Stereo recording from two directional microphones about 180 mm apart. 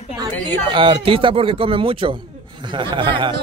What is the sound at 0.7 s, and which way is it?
Speech, 30° right (ahead or behind).